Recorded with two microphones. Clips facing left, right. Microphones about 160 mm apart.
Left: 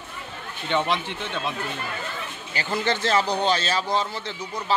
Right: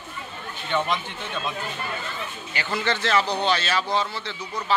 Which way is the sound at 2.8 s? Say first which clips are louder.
Even; 40° left (ahead or behind).